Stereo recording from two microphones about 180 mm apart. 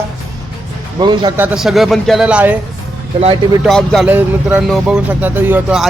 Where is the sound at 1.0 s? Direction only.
25° right (ahead or behind).